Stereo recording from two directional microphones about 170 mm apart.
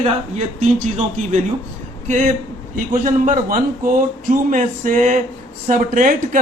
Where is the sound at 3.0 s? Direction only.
50° right (ahead or behind).